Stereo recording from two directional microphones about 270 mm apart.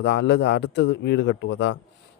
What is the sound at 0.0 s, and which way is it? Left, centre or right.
A man's voice, left.